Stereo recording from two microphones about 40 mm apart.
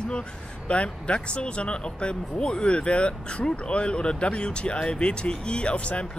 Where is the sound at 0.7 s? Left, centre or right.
Left.